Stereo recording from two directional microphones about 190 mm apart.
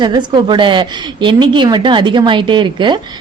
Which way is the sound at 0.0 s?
25° right (ahead or behind).